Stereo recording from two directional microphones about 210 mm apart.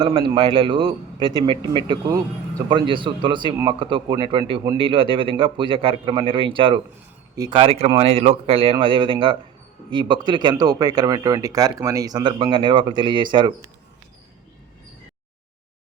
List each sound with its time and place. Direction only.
0.0 s speech: 25° right (ahead or behind)